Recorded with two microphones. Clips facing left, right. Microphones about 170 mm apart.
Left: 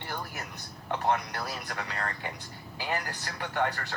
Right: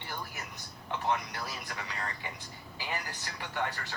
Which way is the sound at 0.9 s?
55° left (ahead or behind).